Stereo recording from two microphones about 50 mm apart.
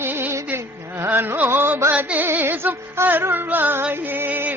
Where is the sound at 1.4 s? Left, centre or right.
Right.